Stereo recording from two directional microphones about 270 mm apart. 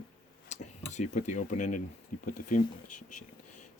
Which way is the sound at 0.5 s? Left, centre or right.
Left.